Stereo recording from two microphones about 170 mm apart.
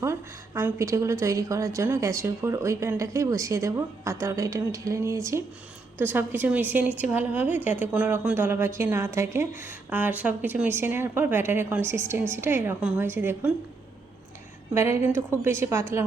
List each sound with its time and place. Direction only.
0.0 s speech: 15° right (ahead or behind)
14.7 s speech: 15° right (ahead or behind)